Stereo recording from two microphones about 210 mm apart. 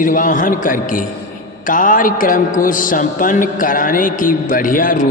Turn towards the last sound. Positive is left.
turn(degrees=40)  # may be behind; listen again after turning